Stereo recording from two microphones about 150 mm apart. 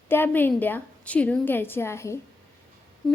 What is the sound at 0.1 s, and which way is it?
A woman's voice, 15° left (ahead or behind).